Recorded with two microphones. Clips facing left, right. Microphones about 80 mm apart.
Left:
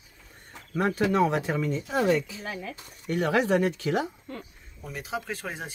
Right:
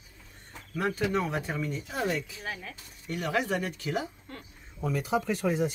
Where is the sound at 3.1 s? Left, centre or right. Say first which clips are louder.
Left 6 dB; left.